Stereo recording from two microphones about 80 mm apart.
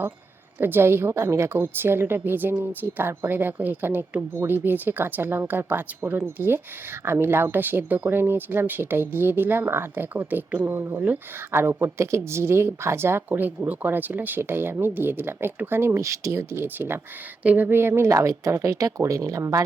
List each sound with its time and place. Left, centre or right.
0.6 s a woman's voice: right
16.0 s speech: right